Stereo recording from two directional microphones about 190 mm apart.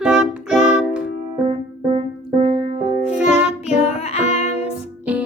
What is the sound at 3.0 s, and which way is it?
Music, 5° right (ahead or behind).